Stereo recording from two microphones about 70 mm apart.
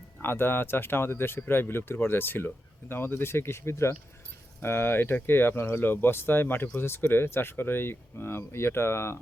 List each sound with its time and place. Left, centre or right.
0.2 s speech: left